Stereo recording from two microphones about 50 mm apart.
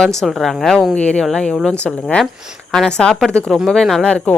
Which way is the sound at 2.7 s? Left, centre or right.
Centre.